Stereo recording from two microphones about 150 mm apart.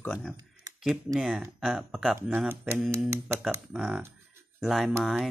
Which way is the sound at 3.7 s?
Centre (ahead or behind).